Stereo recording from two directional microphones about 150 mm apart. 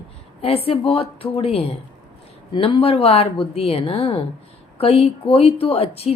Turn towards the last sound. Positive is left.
turn(degrees=40)  # may be behind; listen again after turning